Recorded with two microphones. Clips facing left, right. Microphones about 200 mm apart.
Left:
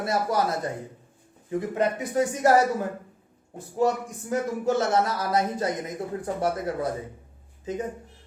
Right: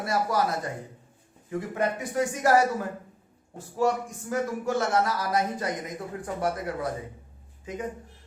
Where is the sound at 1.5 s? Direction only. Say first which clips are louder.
Left 3 dB; 20° left (ahead or behind).